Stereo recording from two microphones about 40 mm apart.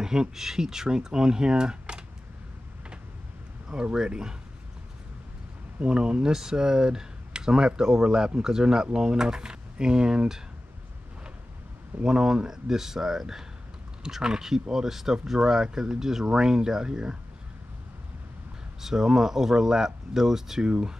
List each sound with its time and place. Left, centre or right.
0.0 s speech: centre
3.6 s speech: right
5.8 s speech: right
12.0 s speech: centre
18.8 s speech: centre
20.6 s speech: right